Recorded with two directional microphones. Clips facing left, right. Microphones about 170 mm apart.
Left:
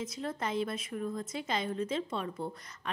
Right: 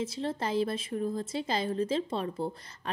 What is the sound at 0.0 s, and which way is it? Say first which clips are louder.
A woman's voice: right 4 dB; 30° right (ahead or behind).